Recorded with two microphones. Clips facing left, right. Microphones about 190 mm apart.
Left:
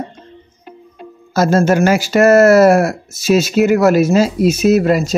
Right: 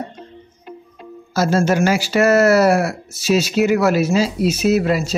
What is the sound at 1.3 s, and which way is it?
Speech, 50° left (ahead or behind).